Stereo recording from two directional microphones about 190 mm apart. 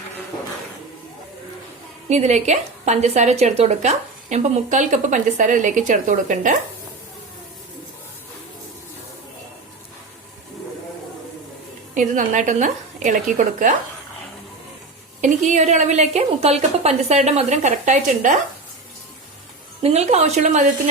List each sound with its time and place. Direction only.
2.0 s a woman's voice: 35° right (ahead or behind)
11.9 s a woman's voice: 40° right (ahead or behind)
15.2 s a woman's voice: 40° right (ahead or behind)
19.8 s a woman's voice: 35° right (ahead or behind)